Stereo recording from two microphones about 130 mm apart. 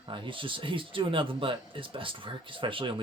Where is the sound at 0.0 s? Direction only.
40° right (ahead or behind).